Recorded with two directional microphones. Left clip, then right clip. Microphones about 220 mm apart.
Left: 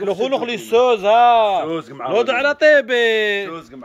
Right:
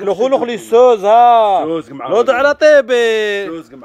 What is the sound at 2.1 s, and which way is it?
Speech, 25° right (ahead or behind).